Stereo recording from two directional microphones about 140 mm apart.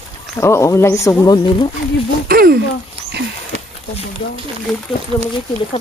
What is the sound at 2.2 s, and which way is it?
Speech, 90° right.